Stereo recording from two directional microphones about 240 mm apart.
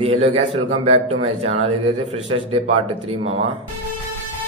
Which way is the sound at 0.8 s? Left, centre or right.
Right.